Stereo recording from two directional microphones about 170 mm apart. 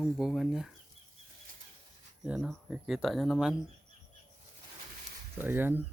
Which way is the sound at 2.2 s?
Centre (ahead or behind).